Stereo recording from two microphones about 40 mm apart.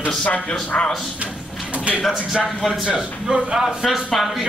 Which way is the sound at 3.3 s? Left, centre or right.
Centre.